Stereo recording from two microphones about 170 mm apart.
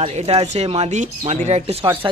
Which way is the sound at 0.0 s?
35° right (ahead or behind).